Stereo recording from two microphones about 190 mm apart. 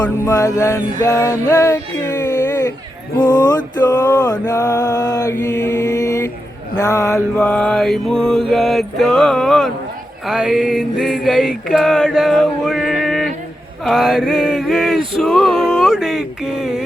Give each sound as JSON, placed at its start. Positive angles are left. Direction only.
{"t": 0.0, "sound": "music", "side_deg": 20}
{"t": 2.0, "sound": "a sound", "side_deg": 20}
{"t": 6.7, "sound": "music", "side_deg": 15}
{"t": 7.3, "sound": "male singing", "side_deg": 5}
{"t": 10.2, "sound": "mantra", "side_deg": 0}
{"t": 13.8, "sound": "male singing", "side_deg": 0}